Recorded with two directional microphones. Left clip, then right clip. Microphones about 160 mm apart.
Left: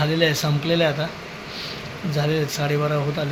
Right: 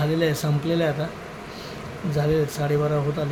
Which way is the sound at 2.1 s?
5° right (ahead or behind).